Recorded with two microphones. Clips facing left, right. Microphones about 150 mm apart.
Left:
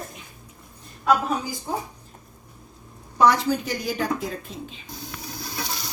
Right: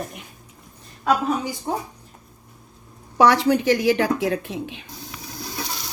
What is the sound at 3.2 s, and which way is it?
A woman's voice, 75° right (ahead or behind).